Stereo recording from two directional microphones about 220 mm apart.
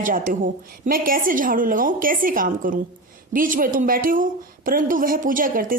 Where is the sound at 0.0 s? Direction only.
40° right (ahead or behind).